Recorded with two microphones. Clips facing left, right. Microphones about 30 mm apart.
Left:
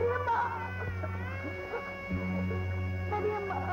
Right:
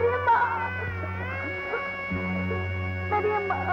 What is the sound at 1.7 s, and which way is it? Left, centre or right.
Music, right.